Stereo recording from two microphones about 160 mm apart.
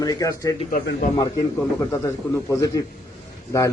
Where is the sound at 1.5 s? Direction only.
15° left (ahead or behind).